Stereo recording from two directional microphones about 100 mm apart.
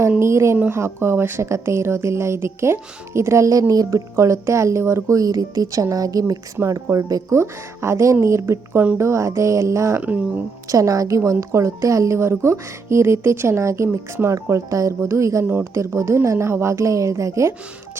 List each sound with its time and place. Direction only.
0.2 s speech: 30° right (ahead or behind)
9.0 s music: 30° right (ahead or behind)
10.0 s speech: 15° right (ahead or behind)
10.7 s speech: 35° right (ahead or behind)
15.4 s speech: 20° right (ahead or behind)